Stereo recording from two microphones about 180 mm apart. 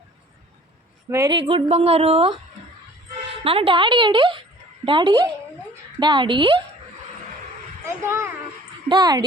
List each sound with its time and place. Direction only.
1.1 s speech: 20° right (ahead or behind)
1.5 s a woman's voice: 30° right (ahead or behind)
3.4 s speech: 30° right (ahead or behind)
8.0 s a child's voice: 15° right (ahead or behind)